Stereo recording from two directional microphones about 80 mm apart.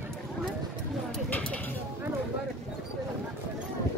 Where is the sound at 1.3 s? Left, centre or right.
Centre.